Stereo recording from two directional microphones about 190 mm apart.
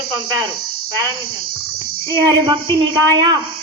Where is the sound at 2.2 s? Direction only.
25° right (ahead or behind).